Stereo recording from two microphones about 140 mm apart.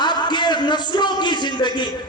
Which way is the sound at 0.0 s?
30° left (ahead or behind).